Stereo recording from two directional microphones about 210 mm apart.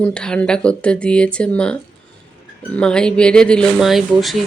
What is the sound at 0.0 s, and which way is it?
Speech, 5° left (ahead or behind).